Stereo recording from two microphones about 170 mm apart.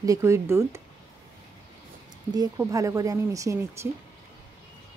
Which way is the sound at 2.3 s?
20° right (ahead or behind).